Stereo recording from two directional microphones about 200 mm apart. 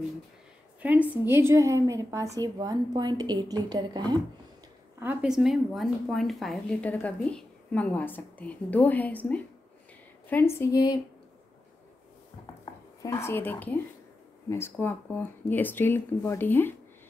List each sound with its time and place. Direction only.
0.8 s a woman's voice: 10° right (ahead or behind)
5.0 s a woman's voice: 5° right (ahead or behind); by 11.0 s 15° left (ahead or behind)
13.0 s a woman's voice: 15° left (ahead or behind)